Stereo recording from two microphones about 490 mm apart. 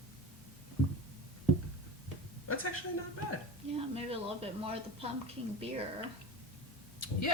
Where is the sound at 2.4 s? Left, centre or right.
Left.